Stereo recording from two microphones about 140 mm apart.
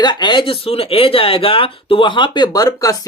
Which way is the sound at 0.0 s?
30° left (ahead or behind).